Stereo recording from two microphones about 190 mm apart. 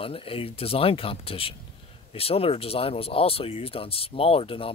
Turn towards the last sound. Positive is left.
turn(degrees=30)  # may be behind; listen again after turning